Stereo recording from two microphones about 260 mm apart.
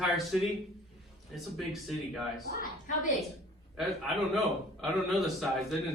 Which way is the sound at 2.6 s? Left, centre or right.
Left.